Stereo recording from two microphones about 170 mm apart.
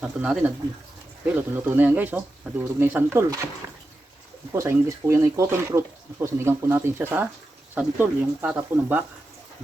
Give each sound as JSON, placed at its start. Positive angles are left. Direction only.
{"t": 0.0, "sound": "speech", "side_deg": -5}
{"t": 4.5, "sound": "speech", "side_deg": -15}